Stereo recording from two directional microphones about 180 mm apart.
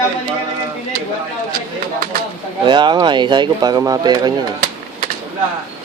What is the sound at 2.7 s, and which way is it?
Speech, 25° right (ahead or behind).